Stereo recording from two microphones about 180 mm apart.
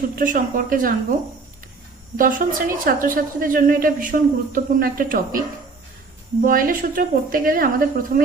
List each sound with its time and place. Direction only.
0.2 s a woman's voice: 50° right (ahead or behind)
2.1 s a woman's voice: 50° right (ahead or behind)
6.4 s a woman's voice: 50° right (ahead or behind)